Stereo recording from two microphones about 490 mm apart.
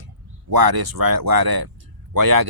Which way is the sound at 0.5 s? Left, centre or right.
Right.